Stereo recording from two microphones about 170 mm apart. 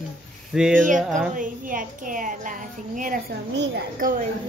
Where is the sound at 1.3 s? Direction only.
50° right (ahead or behind).